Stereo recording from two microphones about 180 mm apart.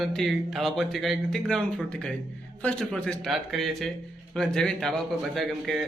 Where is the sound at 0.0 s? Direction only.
Centre (ahead or behind).